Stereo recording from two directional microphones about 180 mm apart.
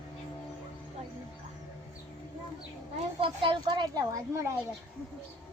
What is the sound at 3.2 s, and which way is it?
A child's voice, 25° right (ahead or behind).